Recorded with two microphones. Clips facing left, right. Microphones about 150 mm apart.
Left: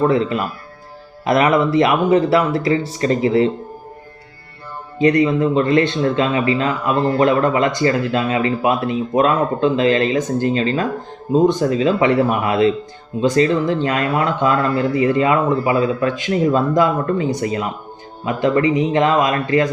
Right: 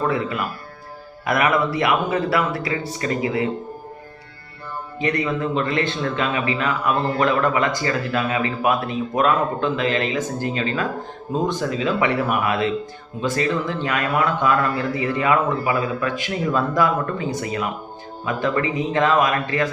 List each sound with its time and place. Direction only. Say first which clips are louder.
0.1 s speech: left 6 dB; 20° left (ahead or behind)
4.9 s speech: left 9 dB; 20° left (ahead or behind)
11.3 s speech: left 8 dB; 20° left (ahead or behind)
11.6 s speech: left 6 dB; 35° left (ahead or behind)